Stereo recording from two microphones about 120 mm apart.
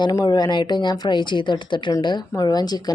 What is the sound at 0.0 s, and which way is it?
Speech, 35° left (ahead or behind).